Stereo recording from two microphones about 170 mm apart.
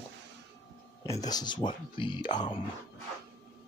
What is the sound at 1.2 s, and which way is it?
Speech, 25° left (ahead or behind).